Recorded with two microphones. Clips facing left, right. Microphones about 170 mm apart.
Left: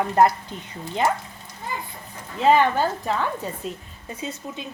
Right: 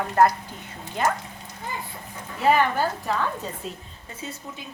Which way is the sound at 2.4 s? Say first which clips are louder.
Left 3 dB; 20° left (ahead or behind).